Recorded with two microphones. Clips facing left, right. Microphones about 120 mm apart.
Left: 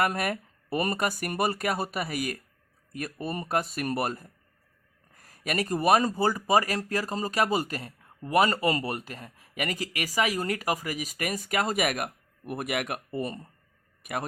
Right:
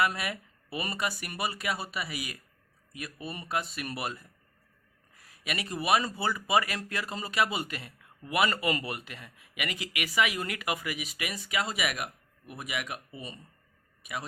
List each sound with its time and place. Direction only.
0.0 s speech: 50° left (ahead or behind)